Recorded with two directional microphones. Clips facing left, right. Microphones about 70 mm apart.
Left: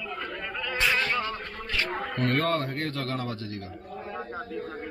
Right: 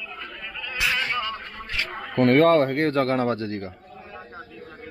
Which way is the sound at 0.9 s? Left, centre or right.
Right.